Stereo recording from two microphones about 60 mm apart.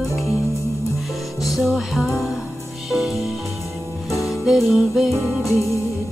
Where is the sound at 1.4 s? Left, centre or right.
Centre.